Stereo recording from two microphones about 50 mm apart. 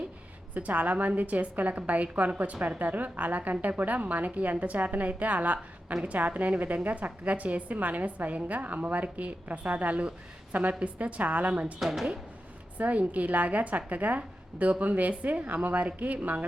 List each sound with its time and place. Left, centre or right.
0.5 s a woman's voice: right
11.8 s a woman's voice: centre
12.7 s a woman's voice: right